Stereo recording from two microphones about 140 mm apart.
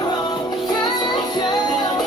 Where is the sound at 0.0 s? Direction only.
30° left (ahead or behind).